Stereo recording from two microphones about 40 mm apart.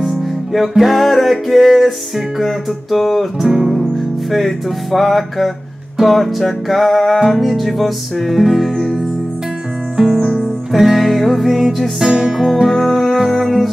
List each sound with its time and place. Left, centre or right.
0.0 s music: centre
12.1 s music: centre
12.6 s music: centre